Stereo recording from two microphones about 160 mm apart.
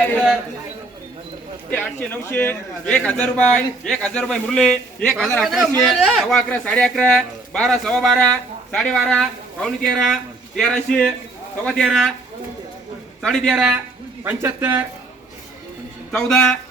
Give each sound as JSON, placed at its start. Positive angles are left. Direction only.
{"t": 1.7, "sound": "a man's voice", "side_deg": 10}
{"t": 13.2, "sound": "a man's voice", "side_deg": 5}
{"t": 14.3, "sound": "speech", "side_deg": -15}
{"t": 16.1, "sound": "a man's voice", "side_deg": 5}